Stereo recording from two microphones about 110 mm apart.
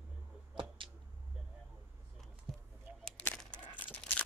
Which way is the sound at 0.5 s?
50° right (ahead or behind).